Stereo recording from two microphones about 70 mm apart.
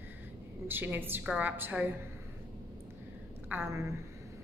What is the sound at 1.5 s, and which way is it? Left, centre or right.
Speech, right.